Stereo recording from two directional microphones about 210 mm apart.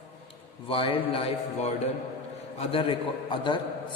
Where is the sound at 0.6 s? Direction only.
25° left (ahead or behind).